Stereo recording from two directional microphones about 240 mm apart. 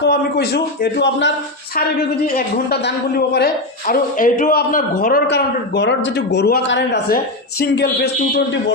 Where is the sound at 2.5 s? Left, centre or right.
Left.